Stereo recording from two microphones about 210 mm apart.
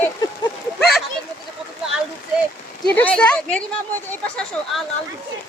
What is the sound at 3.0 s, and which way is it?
Speech, 5° left (ahead or behind).